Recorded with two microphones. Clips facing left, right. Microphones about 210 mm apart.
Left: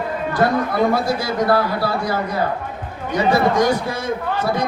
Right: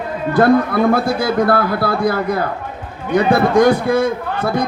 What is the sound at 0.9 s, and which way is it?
Speech, 55° right (ahead or behind).